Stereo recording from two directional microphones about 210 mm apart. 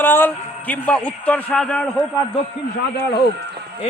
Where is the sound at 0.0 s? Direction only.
10° left (ahead or behind).